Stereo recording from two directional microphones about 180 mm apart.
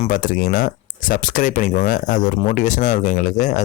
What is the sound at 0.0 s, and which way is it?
Speech, 45° left (ahead or behind).